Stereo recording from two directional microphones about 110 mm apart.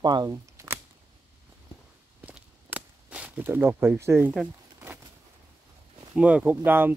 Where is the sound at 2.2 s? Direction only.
15° right (ahead or behind).